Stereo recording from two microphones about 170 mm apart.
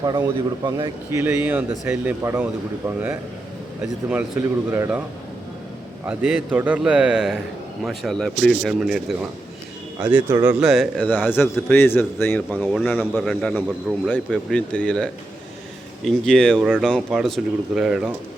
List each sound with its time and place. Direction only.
0.0 s a man's voice: 25° right (ahead or behind)
4.7 s speech: 10° right (ahead or behind)
6.1 s a man's voice: 10° right (ahead or behind)
10.1 s speech: 10° right (ahead or behind); by 12.5 s 15° left (ahead or behind)
12.5 s a man's voice: centre (ahead or behind)
14.1 s a man's voice: 5° left (ahead or behind)